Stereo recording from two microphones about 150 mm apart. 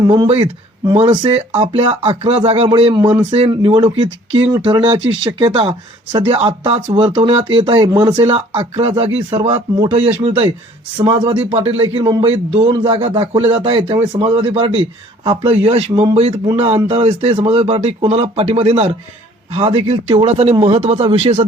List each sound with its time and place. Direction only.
0.1 s speech: 35° right (ahead or behind)
1.4 s speech: 45° right (ahead or behind); by 8.2 s 25° right (ahead or behind)
8.2 s speech: 40° right (ahead or behind)